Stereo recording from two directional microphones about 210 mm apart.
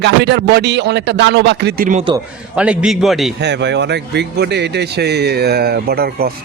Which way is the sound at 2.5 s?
5° right (ahead or behind).